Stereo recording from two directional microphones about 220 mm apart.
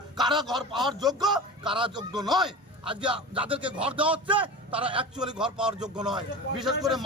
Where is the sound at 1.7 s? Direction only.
20° right (ahead or behind).